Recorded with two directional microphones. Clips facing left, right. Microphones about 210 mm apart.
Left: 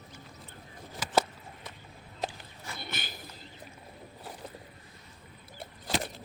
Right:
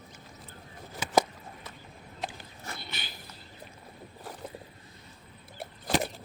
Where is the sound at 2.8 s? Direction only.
50° left (ahead or behind).